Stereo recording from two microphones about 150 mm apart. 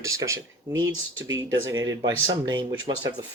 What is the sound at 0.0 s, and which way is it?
Speech, 20° right (ahead or behind).